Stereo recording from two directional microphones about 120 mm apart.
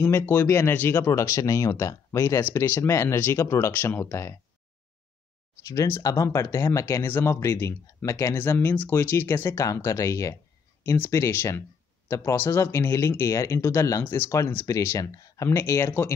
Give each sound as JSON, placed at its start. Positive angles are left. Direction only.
{"t": 0.0, "sound": "speech", "side_deg": 20}
{"t": 5.7, "sound": "speech", "side_deg": 25}